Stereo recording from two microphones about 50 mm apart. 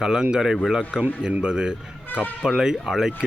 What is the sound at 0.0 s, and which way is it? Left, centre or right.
Speech, centre.